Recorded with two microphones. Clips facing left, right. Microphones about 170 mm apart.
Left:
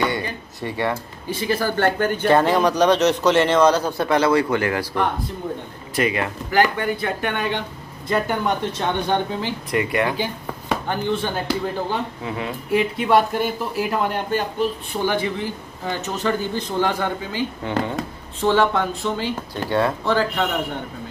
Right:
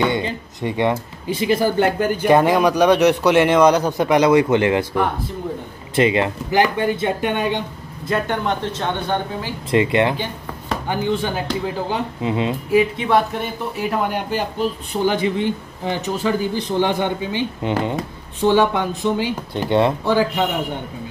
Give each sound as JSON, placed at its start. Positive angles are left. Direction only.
{"t": 0.0, "sound": "speech", "side_deg": -20}
{"t": 5.9, "sound": "speech", "side_deg": -25}
{"t": 8.1, "sound": "speech", "side_deg": 10}
{"t": 9.7, "sound": "speech", "side_deg": -25}
{"t": 10.1, "sound": "speech", "side_deg": 10}
{"t": 10.9, "sound": "speech", "side_deg": -10}
{"t": 12.7, "sound": "speech", "side_deg": 0}
{"t": 15.0, "sound": "speech", "side_deg": -20}